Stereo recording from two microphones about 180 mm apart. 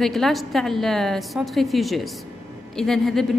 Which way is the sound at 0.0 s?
Centre (ahead or behind).